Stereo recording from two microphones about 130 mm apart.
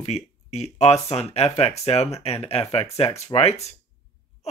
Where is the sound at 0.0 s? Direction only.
55° left (ahead or behind).